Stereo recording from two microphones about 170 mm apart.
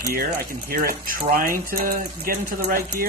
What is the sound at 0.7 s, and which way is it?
Speech, 60° right (ahead or behind).